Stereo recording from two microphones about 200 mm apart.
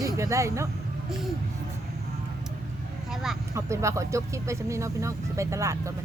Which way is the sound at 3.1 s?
Centre (ahead or behind).